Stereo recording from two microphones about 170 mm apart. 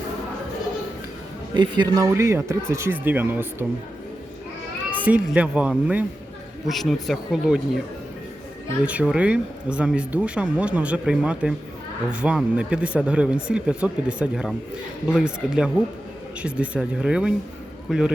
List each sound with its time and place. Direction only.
1.5 s speech: 25° right (ahead or behind)
5.0 s speech: 10° right (ahead or behind)
8.8 s speech: 10° right (ahead or behind)